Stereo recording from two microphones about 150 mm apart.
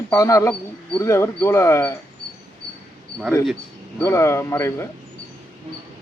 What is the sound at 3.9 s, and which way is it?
Speech, 15° left (ahead or behind).